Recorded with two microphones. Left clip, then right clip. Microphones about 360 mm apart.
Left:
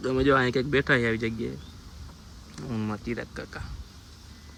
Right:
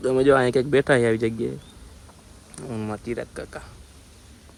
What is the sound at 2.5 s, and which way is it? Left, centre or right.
Speech, centre.